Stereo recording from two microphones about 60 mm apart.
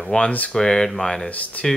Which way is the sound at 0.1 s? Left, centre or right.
Centre.